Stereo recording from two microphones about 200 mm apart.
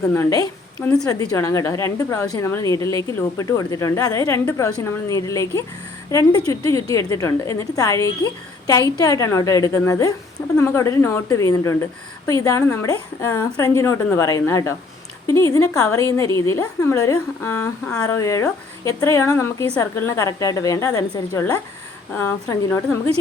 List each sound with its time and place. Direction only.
0.1 s a woman's voice: 15° left (ahead or behind)
0.8 s a woman's voice: 5° left (ahead or behind)
1.0 s a woman's voice: 20° left (ahead or behind)